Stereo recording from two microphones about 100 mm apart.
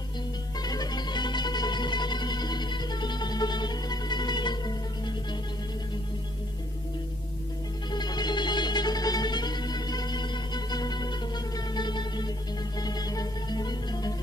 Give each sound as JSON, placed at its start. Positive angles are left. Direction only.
{"t": 0.6, "sound": "music", "side_deg": 40}
{"t": 7.9, "sound": "music", "side_deg": 45}